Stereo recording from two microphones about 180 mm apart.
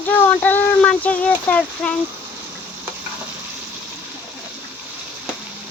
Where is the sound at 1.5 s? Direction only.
5° left (ahead or behind).